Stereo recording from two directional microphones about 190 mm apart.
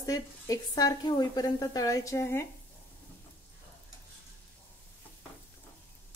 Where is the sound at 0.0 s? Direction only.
20° left (ahead or behind).